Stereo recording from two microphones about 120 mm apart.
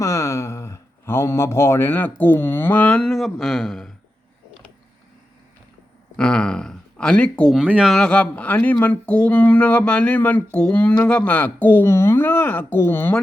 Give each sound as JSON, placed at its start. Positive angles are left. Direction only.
{"t": 0.0, "sound": "speech", "side_deg": 25}
{"t": 6.1, "sound": "speech", "side_deg": 5}
{"t": 7.6, "sound": "speech", "side_deg": -10}
{"t": 7.9, "sound": "speech", "side_deg": 10}